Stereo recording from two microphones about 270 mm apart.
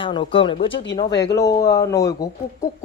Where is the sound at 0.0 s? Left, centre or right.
Centre.